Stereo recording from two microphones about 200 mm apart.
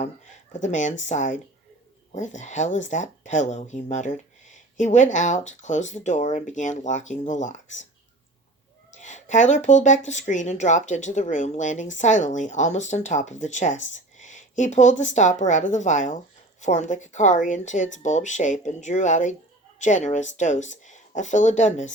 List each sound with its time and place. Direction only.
0.5 s speech: 35° left (ahead or behind)
8.9 s speech: 35° left (ahead or behind)